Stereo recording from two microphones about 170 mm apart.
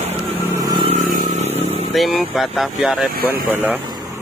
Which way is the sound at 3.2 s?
10° right (ahead or behind).